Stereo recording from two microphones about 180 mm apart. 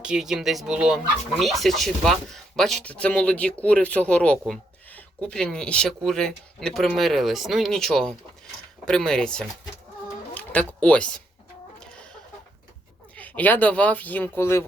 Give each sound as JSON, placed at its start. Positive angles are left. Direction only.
{"t": 0.0, "sound": "speech", "side_deg": -5}
{"t": 10.3, "sound": "a sound", "side_deg": 10}
{"t": 11.8, "sound": "chicken", "side_deg": 5}
{"t": 13.1, "sound": "speech", "side_deg": 10}